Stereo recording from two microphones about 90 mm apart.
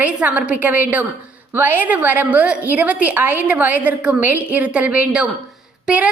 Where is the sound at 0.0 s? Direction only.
15° right (ahead or behind).